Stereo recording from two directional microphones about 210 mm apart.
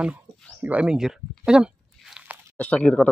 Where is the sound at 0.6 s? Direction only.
5° right (ahead or behind).